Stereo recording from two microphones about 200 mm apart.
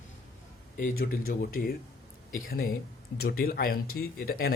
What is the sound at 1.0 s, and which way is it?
Speech, 45° left (ahead or behind).